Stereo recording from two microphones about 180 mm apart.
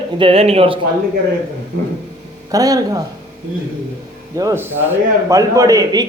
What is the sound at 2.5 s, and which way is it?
Speech, 20° right (ahead or behind).